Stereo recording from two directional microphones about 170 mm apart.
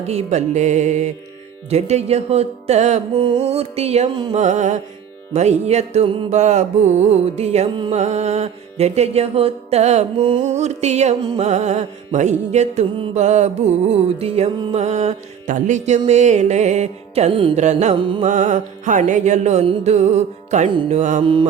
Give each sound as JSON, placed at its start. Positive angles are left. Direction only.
{"t": 0.1, "sound": "music", "side_deg": -40}
{"t": 21.2, "sound": "music", "side_deg": -30}